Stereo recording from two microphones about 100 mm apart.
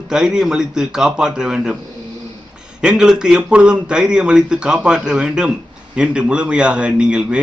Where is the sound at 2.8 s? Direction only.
5° right (ahead or behind).